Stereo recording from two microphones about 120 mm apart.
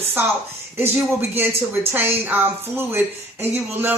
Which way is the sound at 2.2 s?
15° right (ahead or behind).